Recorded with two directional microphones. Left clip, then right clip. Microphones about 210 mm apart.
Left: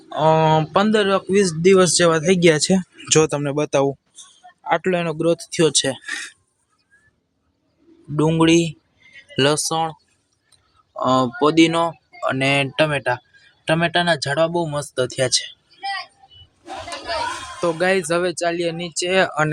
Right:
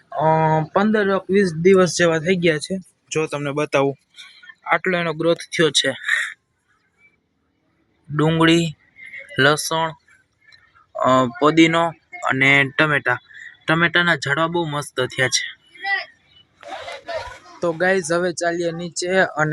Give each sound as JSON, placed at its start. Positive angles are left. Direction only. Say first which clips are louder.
{"t": 0.2, "sound": "speech", "louder": "left 2 dB", "side_deg": 5}
{"t": 2.6, "sound": "speech", "louder": "left 9 dB", "side_deg": 50}
{"t": 3.2, "sound": "a man's voice", "louder": "left 3 dB", "side_deg": 30}
{"t": 8.1, "sound": "a man's voice", "louder": "even", "side_deg": 10}
{"t": 10.9, "sound": "a man's voice", "louder": "right 2 dB", "side_deg": 0}
{"t": 17.6, "sound": "a man's voice", "louder": "even", "side_deg": 5}